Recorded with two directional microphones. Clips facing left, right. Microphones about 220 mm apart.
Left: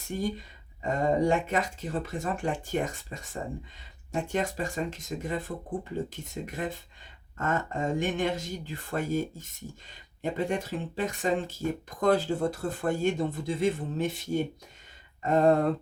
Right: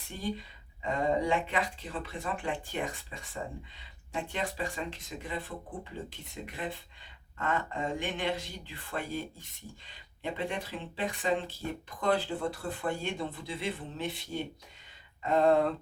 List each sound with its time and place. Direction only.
0.1 s speech: 45° left (ahead or behind)